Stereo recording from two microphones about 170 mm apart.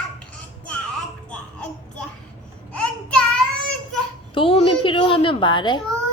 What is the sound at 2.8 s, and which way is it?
Child singing, 5° left (ahead or behind).